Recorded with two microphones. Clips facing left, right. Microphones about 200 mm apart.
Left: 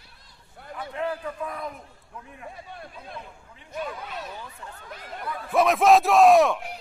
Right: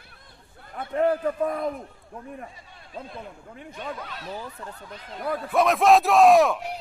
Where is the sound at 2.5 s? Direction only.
60° left (ahead or behind).